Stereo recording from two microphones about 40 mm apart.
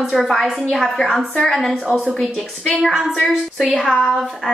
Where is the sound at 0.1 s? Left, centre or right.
Centre.